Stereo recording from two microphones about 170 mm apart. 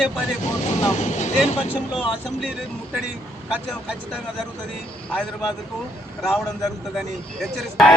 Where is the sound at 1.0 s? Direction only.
45° left (ahead or behind).